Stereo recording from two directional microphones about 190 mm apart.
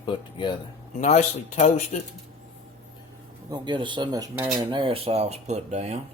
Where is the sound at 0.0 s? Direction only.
25° left (ahead or behind).